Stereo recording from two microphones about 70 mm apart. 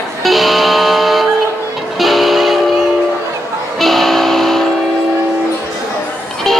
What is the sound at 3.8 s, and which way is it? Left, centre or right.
Music, centre.